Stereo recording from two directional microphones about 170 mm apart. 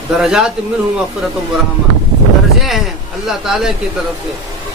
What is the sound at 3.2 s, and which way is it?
Speech, centre (ahead or behind).